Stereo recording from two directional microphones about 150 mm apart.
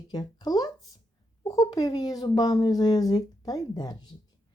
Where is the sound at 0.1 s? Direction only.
30° left (ahead or behind).